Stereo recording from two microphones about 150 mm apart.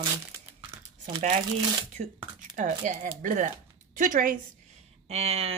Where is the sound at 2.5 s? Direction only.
55° right (ahead or behind).